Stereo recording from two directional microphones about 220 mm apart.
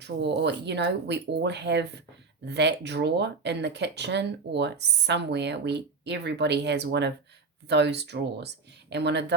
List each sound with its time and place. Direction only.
0.0 s speech: 50° right (ahead or behind)